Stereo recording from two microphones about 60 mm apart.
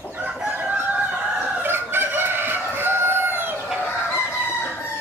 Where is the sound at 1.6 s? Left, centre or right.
Right.